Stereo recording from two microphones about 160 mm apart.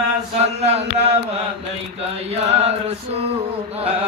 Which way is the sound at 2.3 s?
40° right (ahead or behind).